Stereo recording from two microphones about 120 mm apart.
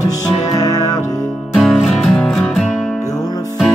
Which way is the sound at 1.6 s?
Centre (ahead or behind).